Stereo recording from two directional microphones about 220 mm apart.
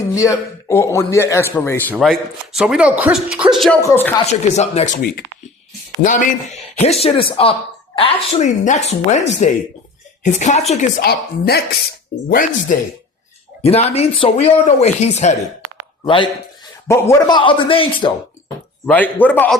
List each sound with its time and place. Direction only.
0.1 s a man's voice: 15° left (ahead or behind)
1.9 s a man's voice: centre (ahead or behind)
4.3 s speech: 30° left (ahead or behind)
6.0 s speech: 35° left (ahead or behind)
13.6 s speech: 30° left (ahead or behind)
18.9 s a man's voice: 5° left (ahead or behind)